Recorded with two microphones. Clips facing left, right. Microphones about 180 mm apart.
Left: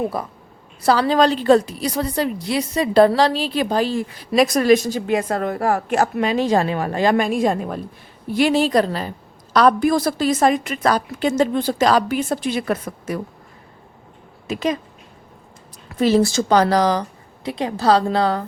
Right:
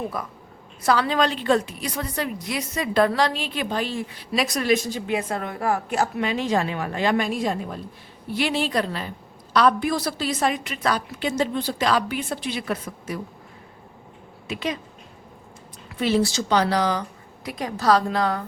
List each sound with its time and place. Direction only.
0.1 s a woman's voice: 30° left (ahead or behind)
5.7 s a woman's voice: 55° left (ahead or behind)
14.4 s speech: 40° left (ahead or behind)
16.0 s a woman's voice: 40° left (ahead or behind)